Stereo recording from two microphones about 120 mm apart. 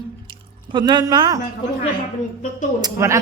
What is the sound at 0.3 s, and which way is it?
Drip, 40° right (ahead or behind).